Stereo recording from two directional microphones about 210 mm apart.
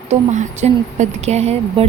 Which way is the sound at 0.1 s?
35° right (ahead or behind).